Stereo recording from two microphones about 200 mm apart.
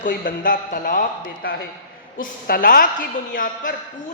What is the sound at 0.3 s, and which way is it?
A woman's voice, 40° left (ahead or behind).